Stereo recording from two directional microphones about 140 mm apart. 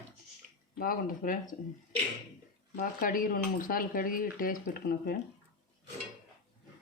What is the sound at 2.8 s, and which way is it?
Speech, 75° left (ahead or behind).